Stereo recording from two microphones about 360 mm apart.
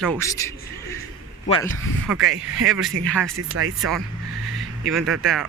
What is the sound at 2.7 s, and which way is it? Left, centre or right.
Speech, centre.